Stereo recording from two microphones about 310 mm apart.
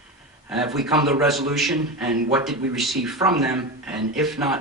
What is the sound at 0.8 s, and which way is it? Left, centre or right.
Speech, centre.